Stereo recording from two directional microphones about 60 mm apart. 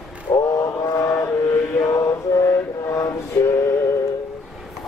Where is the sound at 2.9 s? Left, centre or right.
Left.